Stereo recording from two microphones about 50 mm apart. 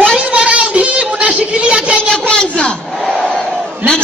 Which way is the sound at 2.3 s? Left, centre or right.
Centre.